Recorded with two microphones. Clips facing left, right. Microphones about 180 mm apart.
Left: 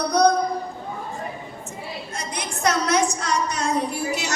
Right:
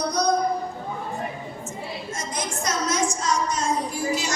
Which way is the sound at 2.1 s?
65° left (ahead or behind).